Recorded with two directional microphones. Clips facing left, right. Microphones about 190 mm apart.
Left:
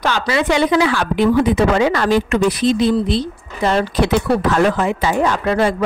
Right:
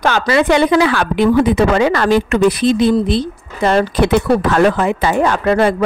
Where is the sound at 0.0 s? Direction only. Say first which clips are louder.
Right 4 dB; 50° right (ahead or behind).